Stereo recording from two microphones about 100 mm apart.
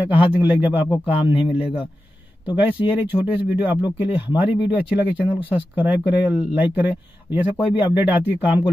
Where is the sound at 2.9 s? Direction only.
15° right (ahead or behind).